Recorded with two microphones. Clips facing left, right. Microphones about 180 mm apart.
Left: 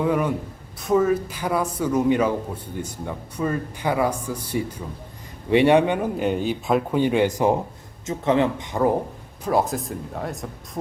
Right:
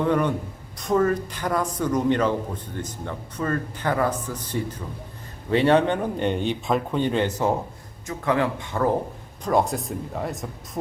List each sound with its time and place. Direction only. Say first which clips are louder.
0.0 s speech: even; 5° left (ahead or behind)
9.4 s speech: even; 5° left (ahead or behind)